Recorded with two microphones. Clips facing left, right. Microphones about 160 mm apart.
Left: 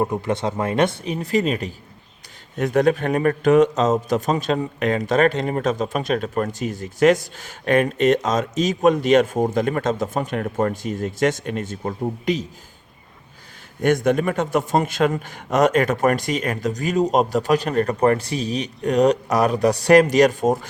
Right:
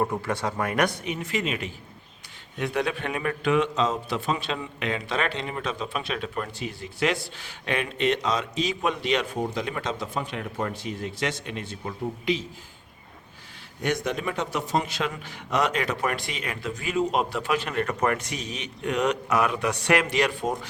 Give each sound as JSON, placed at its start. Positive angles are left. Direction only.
{"t": 0.0, "sound": "a man's voice", "side_deg": 20}
{"t": 13.8, "sound": "a man's voice", "side_deg": 50}